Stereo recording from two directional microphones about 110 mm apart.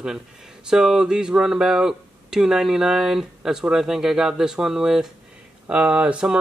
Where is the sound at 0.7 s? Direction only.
5° right (ahead or behind).